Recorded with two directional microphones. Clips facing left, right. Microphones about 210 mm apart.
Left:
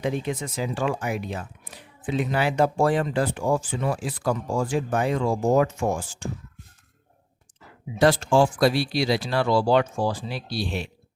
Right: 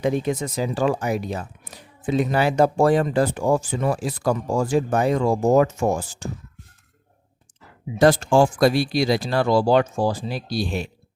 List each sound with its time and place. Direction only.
0.0 s speech: 40° right (ahead or behind)
7.9 s speech: 45° right (ahead or behind)